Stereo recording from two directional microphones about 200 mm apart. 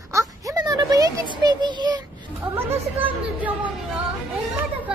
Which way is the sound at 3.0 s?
10° right (ahead or behind).